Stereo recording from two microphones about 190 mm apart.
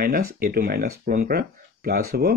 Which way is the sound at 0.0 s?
50° right (ahead or behind).